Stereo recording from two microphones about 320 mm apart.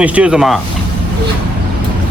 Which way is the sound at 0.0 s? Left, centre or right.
Centre.